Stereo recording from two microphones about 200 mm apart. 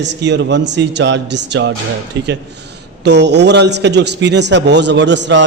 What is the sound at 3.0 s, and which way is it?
A man's voice, 60° right (ahead or behind).